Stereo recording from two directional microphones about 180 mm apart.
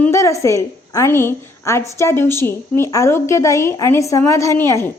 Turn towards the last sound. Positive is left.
turn(degrees=15)  # may be behind; listen again after turning